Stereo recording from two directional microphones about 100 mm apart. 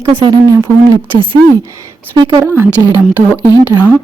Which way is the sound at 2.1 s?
45° right (ahead or behind).